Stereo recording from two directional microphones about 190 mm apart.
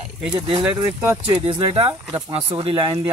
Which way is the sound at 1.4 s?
25° right (ahead or behind).